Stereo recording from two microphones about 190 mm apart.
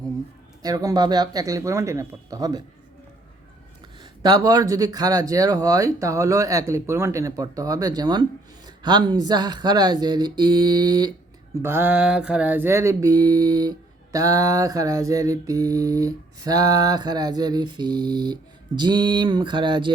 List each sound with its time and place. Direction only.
0.6 s speech: 20° right (ahead or behind)
4.0 s speech: 20° right (ahead or behind)
11.6 s speech: 10° right (ahead or behind)